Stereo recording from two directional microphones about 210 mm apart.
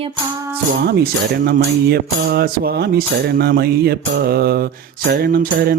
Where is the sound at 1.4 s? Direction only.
50° right (ahead or behind).